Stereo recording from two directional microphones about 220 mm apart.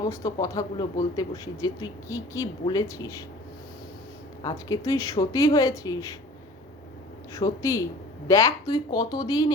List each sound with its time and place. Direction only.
0.0 s speech: 15° left (ahead or behind)
4.4 s speech: 15° left (ahead or behind)
7.3 s speech: 15° left (ahead or behind)